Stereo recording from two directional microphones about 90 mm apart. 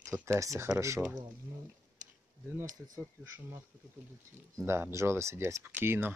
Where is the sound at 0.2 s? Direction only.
35° right (ahead or behind).